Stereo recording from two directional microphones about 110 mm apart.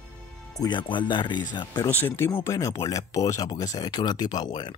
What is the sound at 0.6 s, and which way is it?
Speech, 45° left (ahead or behind).